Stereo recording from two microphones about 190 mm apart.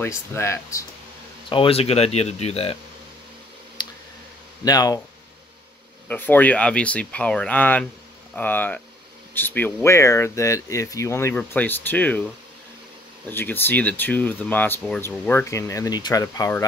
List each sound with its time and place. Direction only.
0.0 s speech: 15° left (ahead or behind)
1.5 s speech: 30° left (ahead or behind)
3.8 s tick: 25° left (ahead or behind)
4.6 s speech: 20° left (ahead or behind)
6.0 s speech: 10° left (ahead or behind)
13.3 s speech: 10° left (ahead or behind)